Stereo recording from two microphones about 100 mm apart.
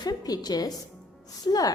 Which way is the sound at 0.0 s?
40° left (ahead or behind).